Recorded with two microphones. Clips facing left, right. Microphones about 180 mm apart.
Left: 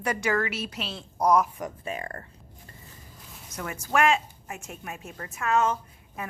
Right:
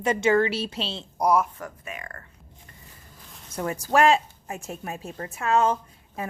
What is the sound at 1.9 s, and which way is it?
Speech, 30° left (ahead or behind).